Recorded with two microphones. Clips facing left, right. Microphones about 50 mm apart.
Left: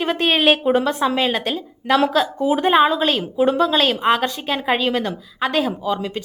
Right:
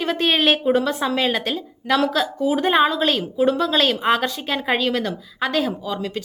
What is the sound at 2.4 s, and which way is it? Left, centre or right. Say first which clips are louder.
Speech: even; left.